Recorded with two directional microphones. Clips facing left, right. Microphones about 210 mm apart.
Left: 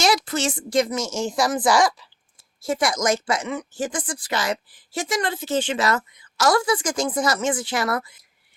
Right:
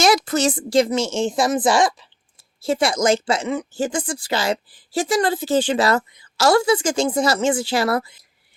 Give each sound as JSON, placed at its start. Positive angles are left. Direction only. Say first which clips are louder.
{"t": 0.0, "sound": "speech", "louder": "right 4 dB", "side_deg": -50}